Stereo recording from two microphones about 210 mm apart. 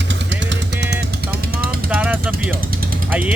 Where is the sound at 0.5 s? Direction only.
55° right (ahead or behind).